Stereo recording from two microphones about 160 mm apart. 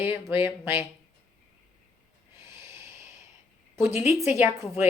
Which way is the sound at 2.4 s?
15° right (ahead or behind).